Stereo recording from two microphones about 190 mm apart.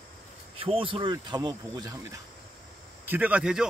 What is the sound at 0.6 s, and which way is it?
Speech, 30° right (ahead or behind).